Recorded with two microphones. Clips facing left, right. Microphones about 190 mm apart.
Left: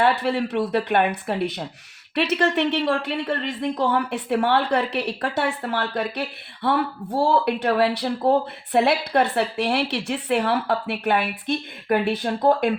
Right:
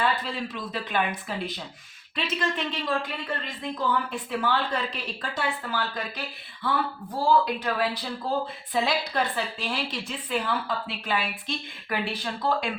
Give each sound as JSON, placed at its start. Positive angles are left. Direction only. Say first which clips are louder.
{"t": 0.0, "sound": "a woman's voice", "louder": "left 7 dB", "side_deg": 70}